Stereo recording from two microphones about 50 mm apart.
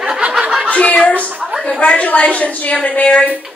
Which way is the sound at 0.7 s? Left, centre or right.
Left.